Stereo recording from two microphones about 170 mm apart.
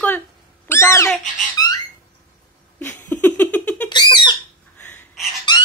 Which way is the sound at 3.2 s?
10° left (ahead or behind).